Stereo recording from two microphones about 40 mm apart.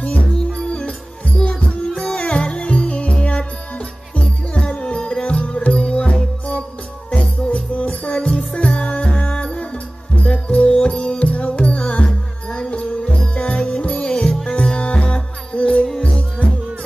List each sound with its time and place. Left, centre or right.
0.0 s music: left
1.9 s music: centre; by 3.4 s left
4.6 s music: left
14.2 s music: centre
14.8 s music: left